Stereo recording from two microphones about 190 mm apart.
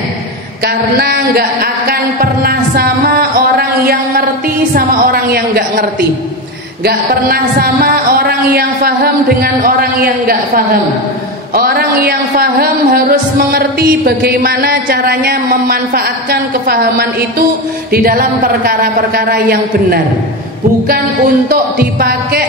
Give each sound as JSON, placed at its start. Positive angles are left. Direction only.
{"t": 0.7, "sound": "speech", "side_deg": -55}
{"t": 7.8, "sound": "speech", "side_deg": -55}
{"t": 21.5, "sound": "speech", "side_deg": -55}